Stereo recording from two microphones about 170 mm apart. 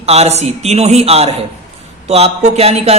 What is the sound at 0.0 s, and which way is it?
Speech, 40° right (ahead or behind).